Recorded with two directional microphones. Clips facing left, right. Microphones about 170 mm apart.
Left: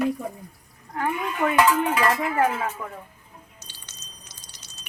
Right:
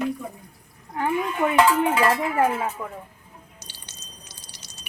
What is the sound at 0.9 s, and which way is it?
Speech, 15° right (ahead or behind).